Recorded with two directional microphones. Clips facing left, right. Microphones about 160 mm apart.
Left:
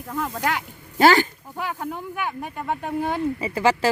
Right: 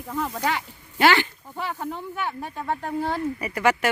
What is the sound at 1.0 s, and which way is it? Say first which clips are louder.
Speech: left 3 dB; 40° left (ahead or behind).